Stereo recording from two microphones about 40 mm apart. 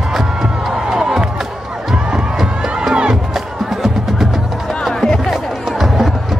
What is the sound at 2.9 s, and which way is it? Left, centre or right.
Music, right.